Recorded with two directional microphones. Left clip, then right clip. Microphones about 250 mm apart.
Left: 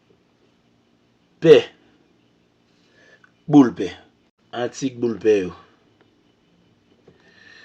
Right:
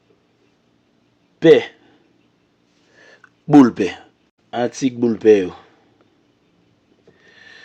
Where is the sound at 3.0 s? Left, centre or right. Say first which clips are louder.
Right 5 dB; right.